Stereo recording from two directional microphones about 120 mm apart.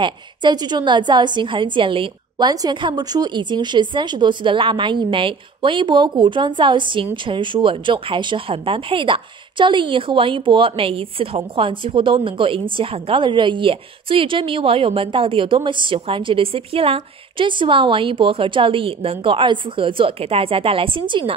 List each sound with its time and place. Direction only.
0.0 s a woman's voice: 40° right (ahead or behind)